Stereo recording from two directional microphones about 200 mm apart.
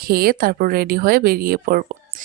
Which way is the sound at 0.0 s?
50° right (ahead or behind).